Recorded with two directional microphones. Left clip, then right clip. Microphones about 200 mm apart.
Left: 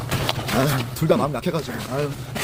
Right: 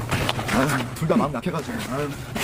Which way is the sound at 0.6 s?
25° left (ahead or behind).